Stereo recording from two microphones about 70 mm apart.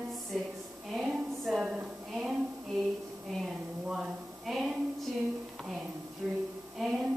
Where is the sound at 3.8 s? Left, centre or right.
Centre.